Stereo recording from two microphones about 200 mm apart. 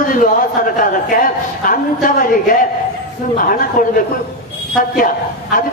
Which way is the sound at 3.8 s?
45° left (ahead or behind).